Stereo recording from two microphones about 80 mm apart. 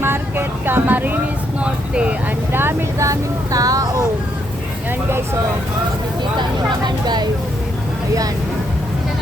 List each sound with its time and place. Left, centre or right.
0.0 s speech: right
2.5 s speech: right
3.0 s vehicle: right
4.9 s speech: right
6.4 s vehicle: right